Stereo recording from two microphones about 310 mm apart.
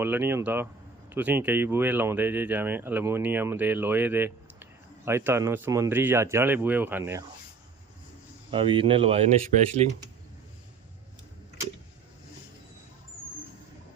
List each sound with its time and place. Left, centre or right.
0.0 s speech: centre
8.4 s speech: centre